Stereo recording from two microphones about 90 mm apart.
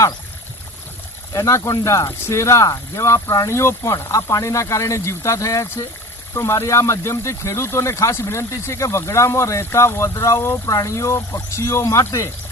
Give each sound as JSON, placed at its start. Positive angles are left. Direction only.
{"t": 1.3, "sound": "speech", "side_deg": 35}